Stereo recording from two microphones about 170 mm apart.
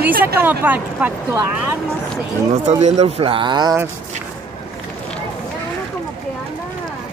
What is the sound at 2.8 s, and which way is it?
Speech, 40° right (ahead or behind).